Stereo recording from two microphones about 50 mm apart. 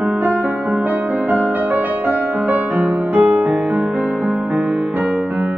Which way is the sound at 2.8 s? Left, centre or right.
Right.